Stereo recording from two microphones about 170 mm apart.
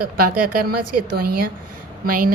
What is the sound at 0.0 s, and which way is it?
A woman's voice, 55° right (ahead or behind).